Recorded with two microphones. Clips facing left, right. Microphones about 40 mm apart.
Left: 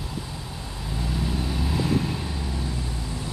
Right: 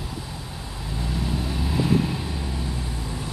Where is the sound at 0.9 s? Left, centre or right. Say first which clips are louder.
Even; centre.